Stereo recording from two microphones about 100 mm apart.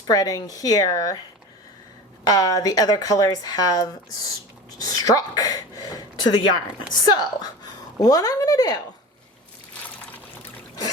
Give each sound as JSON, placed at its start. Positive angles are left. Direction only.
{"t": 0.1, "sound": "speech", "side_deg": 40}
{"t": 2.2, "sound": "a woman's voice", "side_deg": 40}